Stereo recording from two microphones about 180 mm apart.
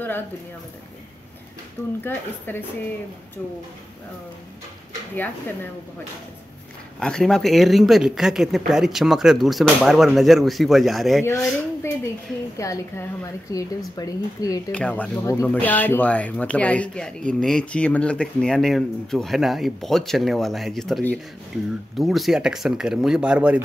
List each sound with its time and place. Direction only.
2.0 s speech: 10° left (ahead or behind)
5.1 s speech: 10° left (ahead or behind)
7.0 s speech: 5° left (ahead or behind)
12.5 s speech: 15° left (ahead or behind)
14.7 s speech: 5° left (ahead or behind)